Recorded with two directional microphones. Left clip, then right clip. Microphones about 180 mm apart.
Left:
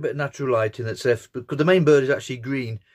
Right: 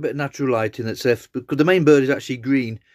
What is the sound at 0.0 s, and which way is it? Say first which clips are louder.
A man's voice: right 2 dB; 40° right (ahead or behind).